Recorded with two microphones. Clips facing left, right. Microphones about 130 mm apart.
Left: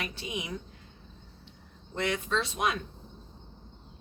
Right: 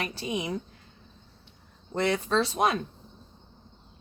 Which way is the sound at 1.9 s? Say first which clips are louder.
Right 5 dB; 35° right (ahead or behind).